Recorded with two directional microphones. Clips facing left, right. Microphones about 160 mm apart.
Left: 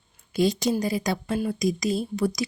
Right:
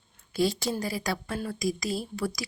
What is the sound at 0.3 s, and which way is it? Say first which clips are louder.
A woman's voice: left 4 dB; 20° left (ahead or behind).